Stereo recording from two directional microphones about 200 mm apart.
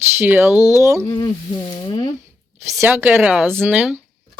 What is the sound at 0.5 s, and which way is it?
Speech, 15° left (ahead or behind).